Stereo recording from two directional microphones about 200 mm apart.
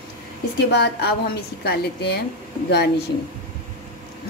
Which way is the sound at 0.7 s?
55° left (ahead or behind).